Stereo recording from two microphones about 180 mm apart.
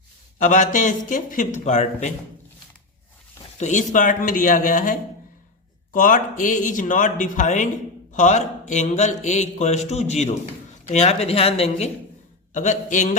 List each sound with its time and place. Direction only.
0.3 s speech: 45° left (ahead or behind)
3.6 s speech: 45° left (ahead or behind)